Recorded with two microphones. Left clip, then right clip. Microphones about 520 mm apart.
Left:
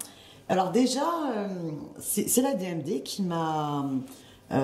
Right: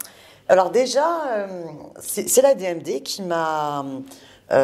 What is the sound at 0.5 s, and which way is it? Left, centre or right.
Speech, right.